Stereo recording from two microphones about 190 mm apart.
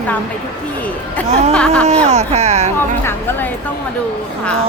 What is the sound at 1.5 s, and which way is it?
Speech, 5° left (ahead or behind).